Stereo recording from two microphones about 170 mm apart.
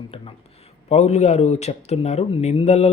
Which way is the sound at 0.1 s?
35° left (ahead or behind).